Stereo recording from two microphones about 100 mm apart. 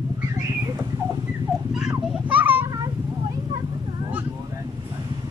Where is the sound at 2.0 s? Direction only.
10° right (ahead or behind).